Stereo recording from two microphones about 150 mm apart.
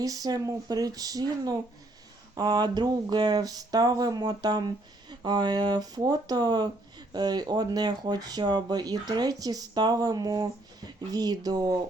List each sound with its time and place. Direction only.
0.0 s speech: 25° right (ahead or behind)